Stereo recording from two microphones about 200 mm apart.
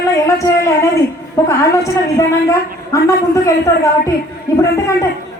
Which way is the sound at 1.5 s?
15° left (ahead or behind).